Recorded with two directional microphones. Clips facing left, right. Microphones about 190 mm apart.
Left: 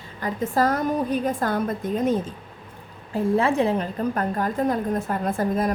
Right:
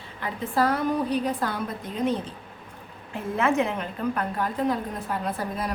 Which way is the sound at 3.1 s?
35° left (ahead or behind).